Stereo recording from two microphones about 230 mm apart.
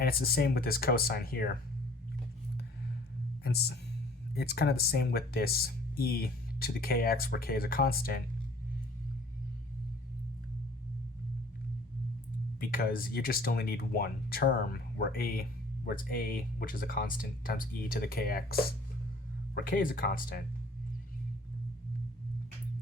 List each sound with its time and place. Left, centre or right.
0.0 s speech: left
3.4 s speech: left
12.5 s speech: left